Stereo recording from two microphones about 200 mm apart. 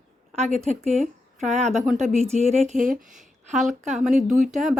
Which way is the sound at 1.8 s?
Centre (ahead or behind).